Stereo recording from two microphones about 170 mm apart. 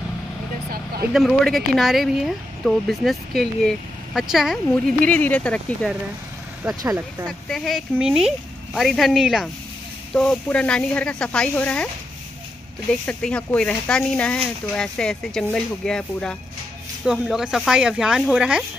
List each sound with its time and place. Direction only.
1.1 s speech: centre (ahead or behind)
6.8 s speech: 20° right (ahead or behind)
7.2 s speech: centre (ahead or behind)
13.0 s speech: 5° left (ahead or behind)